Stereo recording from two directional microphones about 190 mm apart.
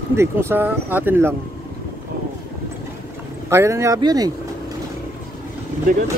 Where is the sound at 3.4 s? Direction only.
15° right (ahead or behind).